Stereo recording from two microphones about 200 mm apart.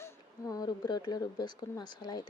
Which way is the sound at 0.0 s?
15° left (ahead or behind).